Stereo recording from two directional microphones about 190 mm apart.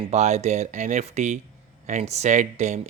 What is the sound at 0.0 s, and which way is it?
Speech, 35° right (ahead or behind).